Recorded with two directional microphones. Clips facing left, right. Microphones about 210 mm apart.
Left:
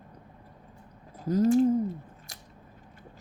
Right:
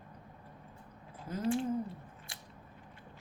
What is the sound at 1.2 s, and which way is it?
Speech, 40° left (ahead or behind).